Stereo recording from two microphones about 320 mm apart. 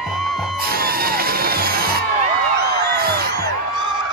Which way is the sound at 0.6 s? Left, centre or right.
Right.